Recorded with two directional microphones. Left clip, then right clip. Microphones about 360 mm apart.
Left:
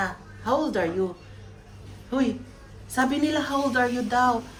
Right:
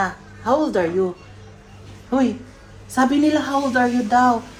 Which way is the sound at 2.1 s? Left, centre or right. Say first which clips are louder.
Right 6 dB; centre.